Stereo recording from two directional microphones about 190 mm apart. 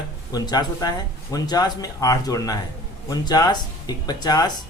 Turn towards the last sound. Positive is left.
turn(degrees=20)  # may be behind; listen again after turning